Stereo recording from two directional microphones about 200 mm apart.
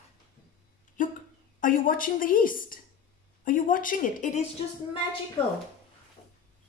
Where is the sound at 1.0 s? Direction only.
40° left (ahead or behind).